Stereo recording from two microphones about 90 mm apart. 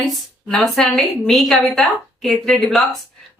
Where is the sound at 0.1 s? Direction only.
Centre (ahead or behind).